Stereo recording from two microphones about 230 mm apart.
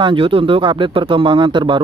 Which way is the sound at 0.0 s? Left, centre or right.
Right.